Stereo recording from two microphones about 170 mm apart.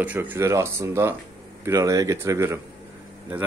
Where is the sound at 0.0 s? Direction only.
10° right (ahead or behind).